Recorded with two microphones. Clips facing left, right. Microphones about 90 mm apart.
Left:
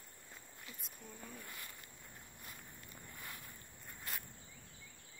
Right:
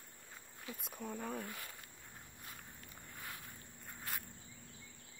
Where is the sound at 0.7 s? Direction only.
55° right (ahead or behind).